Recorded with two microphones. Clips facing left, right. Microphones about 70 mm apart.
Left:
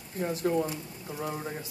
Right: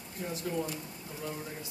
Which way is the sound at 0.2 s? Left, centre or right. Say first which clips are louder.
Left 8 dB; left.